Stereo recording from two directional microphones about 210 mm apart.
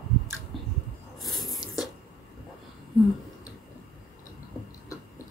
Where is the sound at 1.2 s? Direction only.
Centre (ahead or behind).